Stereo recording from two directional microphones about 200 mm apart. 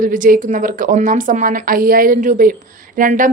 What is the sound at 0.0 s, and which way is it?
A woman's voice, 40° right (ahead or behind).